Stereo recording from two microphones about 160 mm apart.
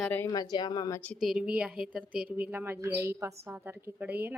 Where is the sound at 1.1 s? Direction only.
5° right (ahead or behind).